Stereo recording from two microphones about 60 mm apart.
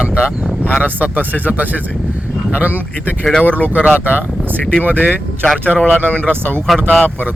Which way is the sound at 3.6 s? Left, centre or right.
Left.